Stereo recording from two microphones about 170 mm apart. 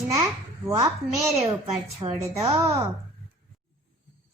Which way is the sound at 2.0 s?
30° right (ahead or behind).